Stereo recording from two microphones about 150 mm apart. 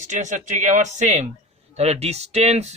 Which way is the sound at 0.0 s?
55° right (ahead or behind).